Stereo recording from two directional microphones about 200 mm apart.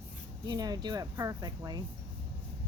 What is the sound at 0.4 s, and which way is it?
A woman's voice, 20° right (ahead or behind).